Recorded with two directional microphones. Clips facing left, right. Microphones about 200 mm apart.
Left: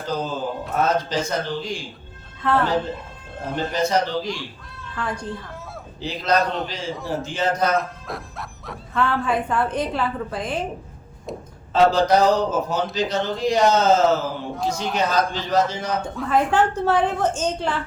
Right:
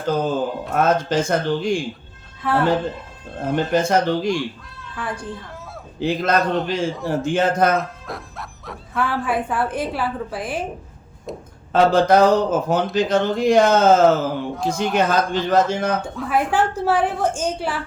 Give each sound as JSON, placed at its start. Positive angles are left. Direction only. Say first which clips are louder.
{"t": 0.0, "sound": "a man's voice", "louder": "right 5 dB", "side_deg": -55}
{"t": 2.4, "sound": "speech", "louder": "even", "side_deg": -10}
{"t": 3.5, "sound": "a man's voice", "louder": "right 3 dB", "side_deg": -50}
{"t": 4.4, "sound": "a child's voice", "louder": "right 9 dB", "side_deg": -5}
{"t": 6.0, "sound": "a man's voice", "louder": "right 3 dB", "side_deg": -50}
{"t": 6.4, "sound": "a man's voice", "louder": "right 3 dB", "side_deg": 0}
{"t": 7.2, "sound": "a man's voice", "louder": "right 5 dB", "side_deg": -50}
{"t": 7.8, "sound": "speech", "louder": "even", "side_deg": 0}
{"t": 11.3, "sound": "a sound", "louder": "right 1 dB", "side_deg": 0}
{"t": 11.7, "sound": "a man's voice", "louder": "right 2 dB", "side_deg": -55}
{"t": 14.5, "sound": "a man's voice", "louder": "right 3 dB", "side_deg": 0}
{"t": 14.9, "sound": "a man's voice", "louder": "right 3 dB", "side_deg": -55}
{"t": 16.0, "sound": "speech", "louder": "left 1 dB", "side_deg": -5}